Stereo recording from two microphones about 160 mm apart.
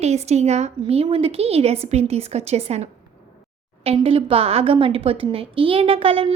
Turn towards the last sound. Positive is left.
turn(degrees=-35)  # may be behind; listen again after turning